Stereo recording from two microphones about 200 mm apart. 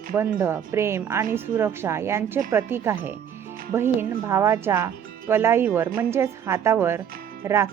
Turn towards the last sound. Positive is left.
turn(degrees=-15)  # may be behind; listen again after turning